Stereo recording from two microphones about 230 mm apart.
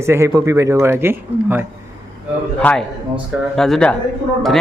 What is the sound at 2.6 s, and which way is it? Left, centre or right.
A man's voice, centre.